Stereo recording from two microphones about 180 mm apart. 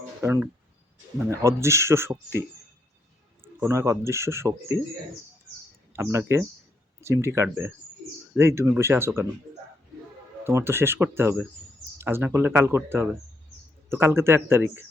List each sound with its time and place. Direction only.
0.2 s speech: 15° right (ahead or behind)
3.4 s speech: 15° right (ahead or behind)
5.9 s speech: 15° right (ahead or behind)
10.4 s speech: 15° right (ahead or behind)